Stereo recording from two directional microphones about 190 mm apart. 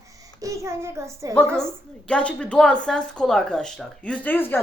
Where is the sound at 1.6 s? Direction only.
5° left (ahead or behind).